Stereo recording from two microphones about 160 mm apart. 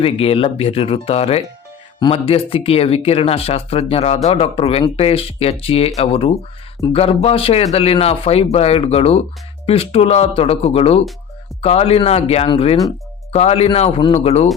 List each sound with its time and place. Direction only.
0.0 s speech: 35° left (ahead or behind)